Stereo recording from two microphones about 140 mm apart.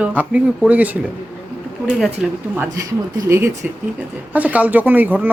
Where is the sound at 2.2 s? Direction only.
5° right (ahead or behind).